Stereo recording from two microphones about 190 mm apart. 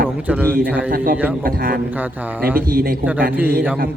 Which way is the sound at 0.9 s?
50° right (ahead or behind).